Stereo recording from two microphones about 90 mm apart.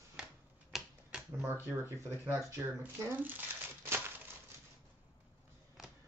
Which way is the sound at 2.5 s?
25° right (ahead or behind).